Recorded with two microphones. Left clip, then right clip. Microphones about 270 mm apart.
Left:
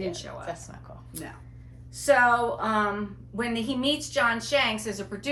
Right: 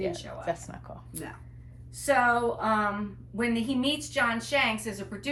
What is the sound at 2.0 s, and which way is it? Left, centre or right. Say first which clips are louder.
A woman's voice: left 3 dB; centre.